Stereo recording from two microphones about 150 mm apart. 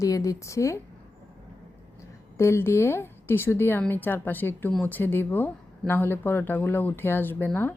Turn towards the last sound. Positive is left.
turn(degrees=15)  # may be behind; listen again after turning